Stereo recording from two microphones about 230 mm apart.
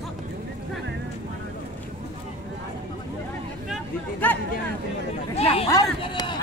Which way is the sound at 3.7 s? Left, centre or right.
Centre.